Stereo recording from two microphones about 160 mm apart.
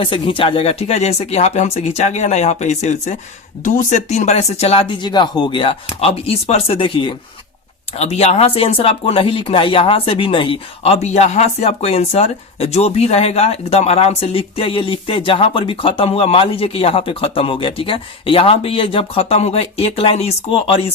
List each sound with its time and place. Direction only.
0.0 s speech: 35° left (ahead or behind)